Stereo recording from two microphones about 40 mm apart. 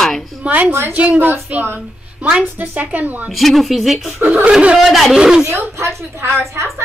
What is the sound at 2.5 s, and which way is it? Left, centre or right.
Speech, right.